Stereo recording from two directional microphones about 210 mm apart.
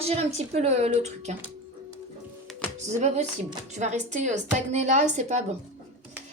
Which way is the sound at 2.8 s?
35° right (ahead or behind).